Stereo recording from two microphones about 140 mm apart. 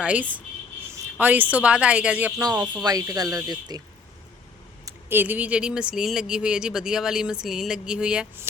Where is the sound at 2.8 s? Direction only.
25° right (ahead or behind).